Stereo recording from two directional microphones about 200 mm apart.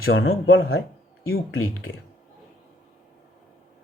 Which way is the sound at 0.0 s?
85° left.